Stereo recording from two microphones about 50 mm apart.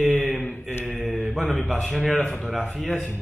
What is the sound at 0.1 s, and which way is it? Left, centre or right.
Mantra, centre.